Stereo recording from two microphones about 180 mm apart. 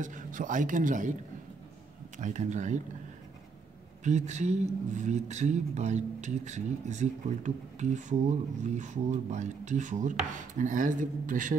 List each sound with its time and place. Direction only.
0.0 s speech: 45° right (ahead or behind)
2.1 s speech: 45° right (ahead or behind)
4.0 s speech: 40° right (ahead or behind)